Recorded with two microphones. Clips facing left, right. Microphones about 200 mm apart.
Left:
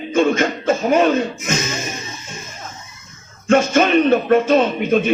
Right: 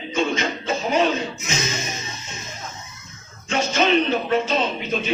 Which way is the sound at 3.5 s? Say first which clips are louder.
Left 6 dB; 50° left (ahead or behind).